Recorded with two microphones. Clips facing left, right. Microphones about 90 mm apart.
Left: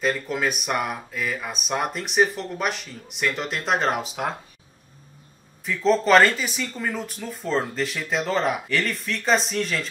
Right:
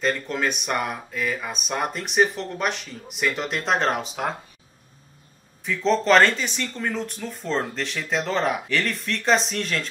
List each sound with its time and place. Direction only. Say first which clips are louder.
0.0 s speech: even; 5° left (ahead or behind)
5.7 s speech: left 1 dB; centre (ahead or behind)